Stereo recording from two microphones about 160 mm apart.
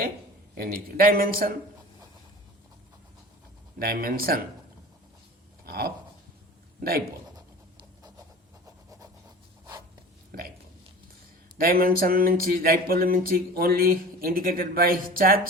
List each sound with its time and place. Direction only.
0.5 s speech: 70° right (ahead or behind)
3.8 s speech: 70° right (ahead or behind)
5.6 s a sound: 65° right (ahead or behind)
10.3 s burping: 65° right (ahead or behind)
11.5 s speech: 65° right (ahead or behind)